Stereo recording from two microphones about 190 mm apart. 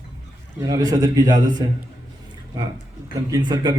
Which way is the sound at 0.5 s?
20° right (ahead or behind).